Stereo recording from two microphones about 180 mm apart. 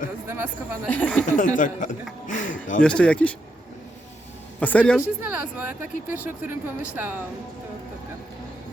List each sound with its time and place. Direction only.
0.3 s speech: 10° right (ahead or behind)
0.9 s speech: 10° left (ahead or behind)
1.3 s speech: 45° left (ahead or behind)
2.2 s a sound: 45° left (ahead or behind)
2.8 s speech: 5° left (ahead or behind)
4.6 s speech: 10° left (ahead or behind)
4.9 s speech: 10° right (ahead or behind)